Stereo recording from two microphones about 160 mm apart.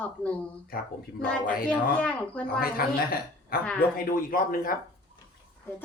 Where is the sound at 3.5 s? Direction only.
70° left (ahead or behind).